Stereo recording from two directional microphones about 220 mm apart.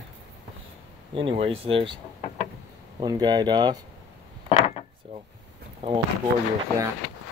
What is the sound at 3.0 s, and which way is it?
Speech, 20° right (ahead or behind).